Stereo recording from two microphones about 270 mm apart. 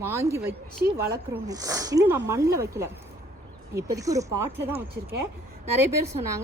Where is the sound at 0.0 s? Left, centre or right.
Centre.